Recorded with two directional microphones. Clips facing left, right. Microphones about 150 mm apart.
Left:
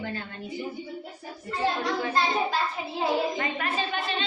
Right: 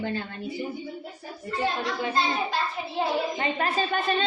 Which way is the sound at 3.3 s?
25° right (ahead or behind).